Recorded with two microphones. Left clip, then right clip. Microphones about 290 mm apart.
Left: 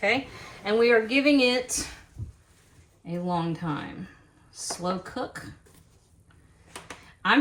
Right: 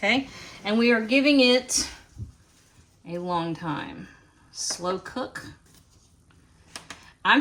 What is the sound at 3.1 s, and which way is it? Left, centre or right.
Speech, right.